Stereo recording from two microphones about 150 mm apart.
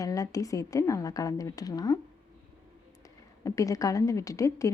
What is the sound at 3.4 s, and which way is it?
A woman's voice, 20° left (ahead or behind).